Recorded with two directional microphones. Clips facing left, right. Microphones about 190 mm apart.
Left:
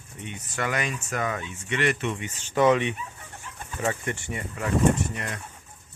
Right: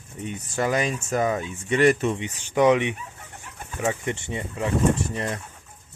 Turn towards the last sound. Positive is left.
turn(degrees=-30)  # may be behind; listen again after turning